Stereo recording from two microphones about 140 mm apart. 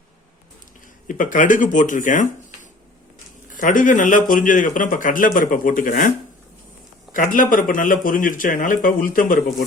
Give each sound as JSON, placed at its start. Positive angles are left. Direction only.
{"t": 1.0, "sound": "speech", "side_deg": 70}
{"t": 7.1, "sound": "speech", "side_deg": 75}